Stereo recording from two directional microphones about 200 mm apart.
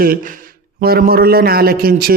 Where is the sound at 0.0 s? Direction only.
45° right (ahead or behind).